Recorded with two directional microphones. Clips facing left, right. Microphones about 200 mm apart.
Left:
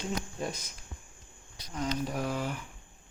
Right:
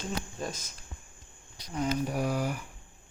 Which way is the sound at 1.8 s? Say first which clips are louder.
Right 3 dB; 10° right (ahead or behind).